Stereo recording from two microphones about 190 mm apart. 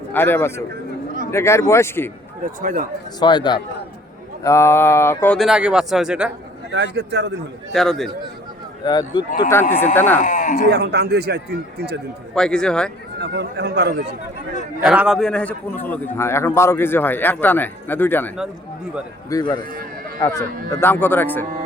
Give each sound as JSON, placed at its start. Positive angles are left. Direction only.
{"t": 0.1, "sound": "a man's voice", "side_deg": 10}
{"t": 2.6, "sound": "a man's voice", "side_deg": -45}
{"t": 3.2, "sound": "a man's voice", "side_deg": 25}
{"t": 5.4, "sound": "speech", "side_deg": -5}
{"t": 6.7, "sound": "a man's voice", "side_deg": -65}
{"t": 7.7, "sound": "speech", "side_deg": 0}
{"t": 8.8, "sound": "speech", "side_deg": 20}
{"t": 9.5, "sound": "a man's voice", "side_deg": 10}
{"t": 10.2, "sound": "speech", "side_deg": 40}
{"t": 10.7, "sound": "a man's voice", "side_deg": -60}
{"t": 12.3, "sound": "speech", "side_deg": 5}
{"t": 13.1, "sound": "a man's voice", "side_deg": -60}
{"t": 14.8, "sound": "a man's voice", "side_deg": -5}
{"t": 19.3, "sound": "a man's voice", "side_deg": 20}